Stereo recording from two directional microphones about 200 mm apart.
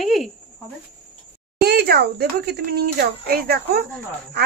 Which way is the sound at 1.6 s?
50° right (ahead or behind).